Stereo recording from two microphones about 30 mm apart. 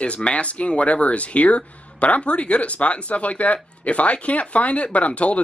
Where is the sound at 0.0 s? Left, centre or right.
Left.